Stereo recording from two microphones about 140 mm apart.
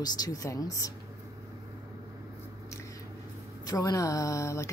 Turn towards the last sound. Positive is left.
turn(degrees=20)  # may be behind; listen again after turning